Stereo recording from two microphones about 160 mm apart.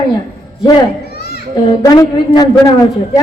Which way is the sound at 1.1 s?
80° left.